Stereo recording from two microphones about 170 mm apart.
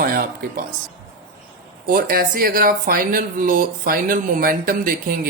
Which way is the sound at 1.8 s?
55° right (ahead or behind).